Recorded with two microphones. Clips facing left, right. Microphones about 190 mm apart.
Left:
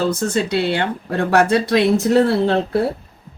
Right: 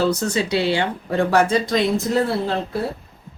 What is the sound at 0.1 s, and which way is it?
Speech, 55° left (ahead or behind).